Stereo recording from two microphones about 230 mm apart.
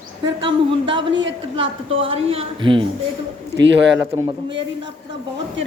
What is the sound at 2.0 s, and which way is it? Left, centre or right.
Speech, right.